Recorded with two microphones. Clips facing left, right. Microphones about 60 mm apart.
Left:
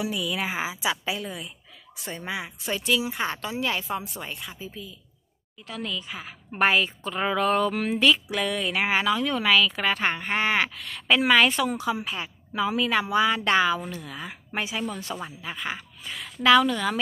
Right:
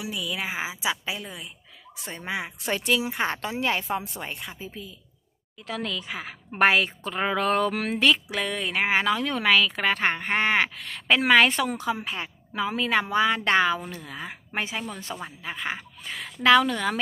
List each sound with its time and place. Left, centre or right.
0.0 s a woman's voice: centre
2.0 s speech: right
3.1 s speech: right
5.6 s speech: right
6.0 s a woman's voice: right
7.2 s speech: right
7.4 s a woman's voice: right
8.4 s speech: right
9.0 s speech: right
11.9 s speech: right
15.1 s a woman's voice: centre
15.6 s speech: right
16.1 s a woman's voice: right